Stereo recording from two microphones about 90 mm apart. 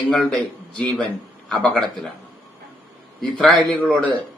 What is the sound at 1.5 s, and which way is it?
Speech, 5° left (ahead or behind).